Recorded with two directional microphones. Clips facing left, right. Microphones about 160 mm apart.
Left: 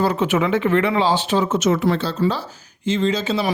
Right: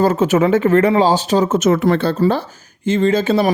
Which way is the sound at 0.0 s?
45° right (ahead or behind).